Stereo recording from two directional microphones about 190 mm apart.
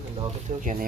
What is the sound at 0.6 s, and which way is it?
Speech, 45° right (ahead or behind).